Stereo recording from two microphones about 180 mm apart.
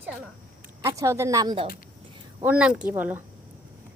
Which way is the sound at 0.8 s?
15° right (ahead or behind).